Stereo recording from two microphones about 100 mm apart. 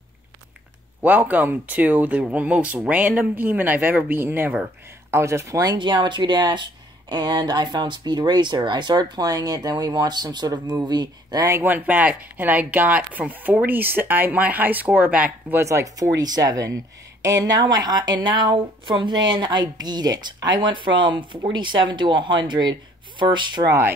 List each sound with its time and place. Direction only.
1.0 s speech: 15° right (ahead or behind)
5.1 s speech: 30° right (ahead or behind)
11.6 s speech: 20° right (ahead or behind)
15.5 s speech: 30° right (ahead or behind); by 23.7 s 50° right (ahead or behind)